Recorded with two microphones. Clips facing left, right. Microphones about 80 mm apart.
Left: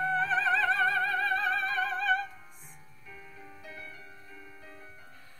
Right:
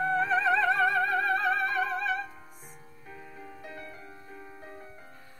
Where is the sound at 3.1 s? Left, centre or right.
Right.